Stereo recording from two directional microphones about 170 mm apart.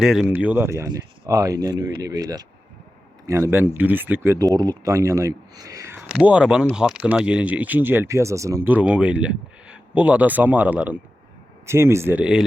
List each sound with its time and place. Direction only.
0.0 s speech: 5° right (ahead or behind)
6.1 s speech: 5° right (ahead or behind)